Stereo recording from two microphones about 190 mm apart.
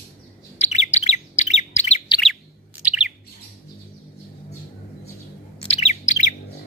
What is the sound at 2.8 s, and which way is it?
Bird, 5° right (ahead or behind).